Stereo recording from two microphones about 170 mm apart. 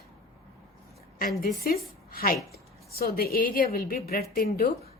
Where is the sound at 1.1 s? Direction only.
55° left (ahead or behind).